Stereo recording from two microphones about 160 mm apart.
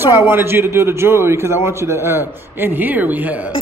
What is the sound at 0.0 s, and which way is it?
A man's voice, 15° right (ahead or behind).